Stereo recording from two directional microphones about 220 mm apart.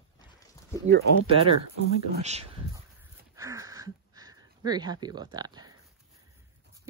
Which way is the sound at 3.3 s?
15° right (ahead or behind).